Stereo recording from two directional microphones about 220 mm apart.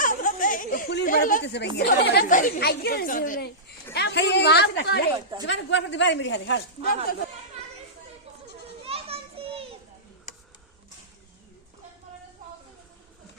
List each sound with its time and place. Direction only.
0.0 s speech: 35° left (ahead or behind)
3.9 s speech: 50° left (ahead or behind)
8.9 s children playing: 25° right (ahead or behind)